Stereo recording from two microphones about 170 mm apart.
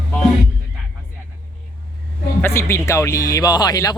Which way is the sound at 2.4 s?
15° left (ahead or behind).